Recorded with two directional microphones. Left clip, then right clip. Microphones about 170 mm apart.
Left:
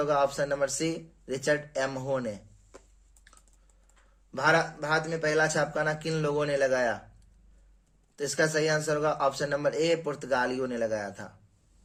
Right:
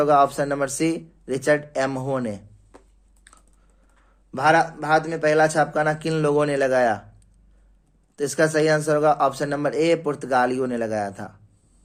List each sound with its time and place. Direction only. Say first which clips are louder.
0.0 s a man's voice: right 8 dB; 45° right (ahead or behind)
4.3 s a man's voice: right 7 dB; 45° right (ahead or behind)
8.1 s speech: right 7 dB; 40° right (ahead or behind)